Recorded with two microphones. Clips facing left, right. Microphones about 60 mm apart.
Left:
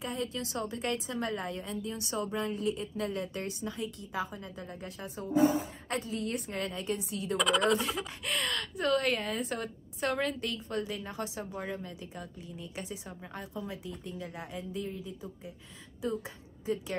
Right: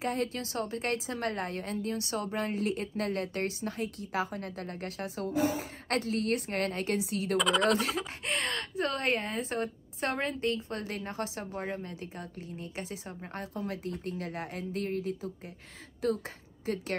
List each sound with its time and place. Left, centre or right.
0.0 s speech: right
0.5 s a woman's voice: right
7.3 s speech: centre
7.9 s a woman's voice: right
13.8 s speech: right
16.6 s a woman's voice: right